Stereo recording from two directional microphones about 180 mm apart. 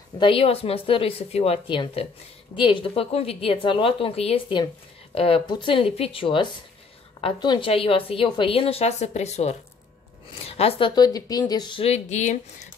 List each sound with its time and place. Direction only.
0.2 s a woman's voice: 30° left (ahead or behind)
10.4 s a sound: 35° left (ahead or behind)
11.0 s a woman's voice: 20° left (ahead or behind); by 12.4 s 40° left (ahead or behind)